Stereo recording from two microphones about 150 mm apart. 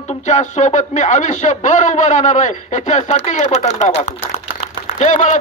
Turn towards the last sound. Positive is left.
turn(degrees=55)  # may be behind; listen again after turning